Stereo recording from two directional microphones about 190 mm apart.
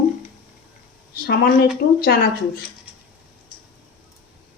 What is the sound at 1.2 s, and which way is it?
Speech, 55° left (ahead or behind).